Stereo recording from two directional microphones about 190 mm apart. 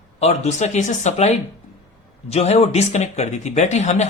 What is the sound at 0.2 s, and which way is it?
A man's voice, 35° left (ahead or behind).